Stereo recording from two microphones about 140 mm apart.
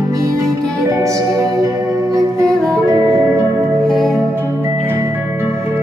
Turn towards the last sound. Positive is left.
turn(degrees=0)  # may be behind; listen again after turning